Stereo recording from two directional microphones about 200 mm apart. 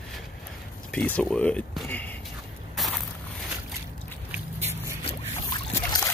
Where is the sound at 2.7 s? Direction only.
Centre (ahead or behind).